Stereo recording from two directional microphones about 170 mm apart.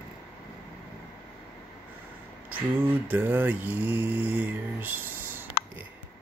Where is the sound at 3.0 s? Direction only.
10° right (ahead or behind).